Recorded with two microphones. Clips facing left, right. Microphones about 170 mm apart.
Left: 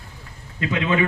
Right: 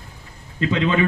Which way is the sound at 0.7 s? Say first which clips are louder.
Right 2 dB; 15° left (ahead or behind).